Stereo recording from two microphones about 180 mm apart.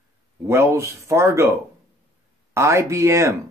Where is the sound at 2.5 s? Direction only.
15° right (ahead or behind).